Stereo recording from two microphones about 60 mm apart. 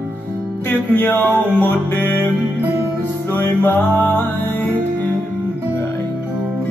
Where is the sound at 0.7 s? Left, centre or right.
Left.